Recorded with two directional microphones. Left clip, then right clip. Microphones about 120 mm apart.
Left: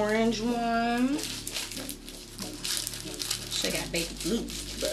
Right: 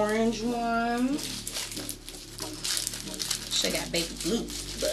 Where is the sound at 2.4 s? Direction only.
15° right (ahead or behind).